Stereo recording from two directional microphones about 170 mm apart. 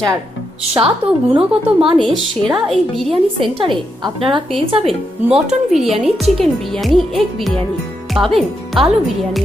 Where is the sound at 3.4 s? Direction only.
30° right (ahead or behind).